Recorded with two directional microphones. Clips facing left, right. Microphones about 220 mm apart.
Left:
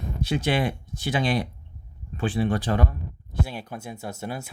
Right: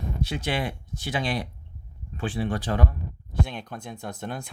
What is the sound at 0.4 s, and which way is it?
Speech, 55° left (ahead or behind).